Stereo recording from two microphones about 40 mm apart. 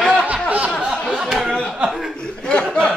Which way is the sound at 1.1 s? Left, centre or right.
Centre.